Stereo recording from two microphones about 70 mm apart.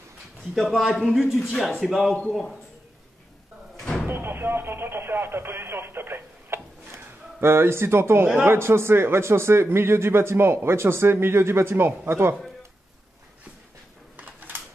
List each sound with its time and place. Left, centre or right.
0.6 s speech: centre
3.8 s slam: centre
4.1 s radio: right
8.5 s a man's voice: right
14.1 s a sound: right